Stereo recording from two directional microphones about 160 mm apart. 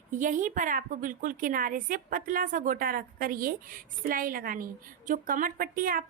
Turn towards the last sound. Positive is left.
turn(degrees=-60)  # may be behind; listen again after turning